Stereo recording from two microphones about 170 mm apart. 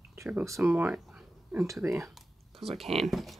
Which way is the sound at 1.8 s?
15° right (ahead or behind).